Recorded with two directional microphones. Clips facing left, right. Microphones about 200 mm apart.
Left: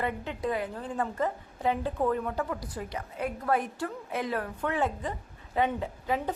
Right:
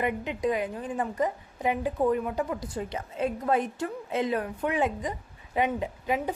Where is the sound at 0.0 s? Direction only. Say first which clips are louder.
Right 4 dB; 15° right (ahead or behind).